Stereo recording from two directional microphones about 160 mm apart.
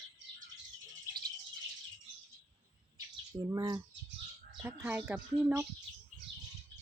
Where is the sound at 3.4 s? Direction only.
25° right (ahead or behind).